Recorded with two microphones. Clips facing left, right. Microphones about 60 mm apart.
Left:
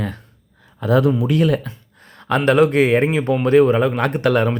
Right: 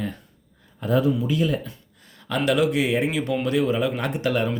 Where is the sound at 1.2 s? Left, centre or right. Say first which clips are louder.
Left 6 dB; left.